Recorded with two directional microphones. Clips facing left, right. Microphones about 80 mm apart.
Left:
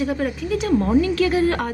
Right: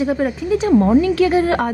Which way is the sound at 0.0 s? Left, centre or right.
Right.